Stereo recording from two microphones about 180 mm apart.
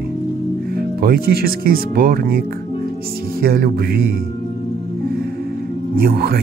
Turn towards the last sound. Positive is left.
turn(degrees=-55)  # may be behind; listen again after turning